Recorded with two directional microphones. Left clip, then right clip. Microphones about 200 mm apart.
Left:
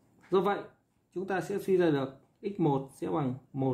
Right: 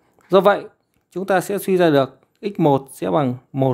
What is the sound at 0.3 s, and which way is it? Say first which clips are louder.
Speech: right 14 dB; 60° right (ahead or behind).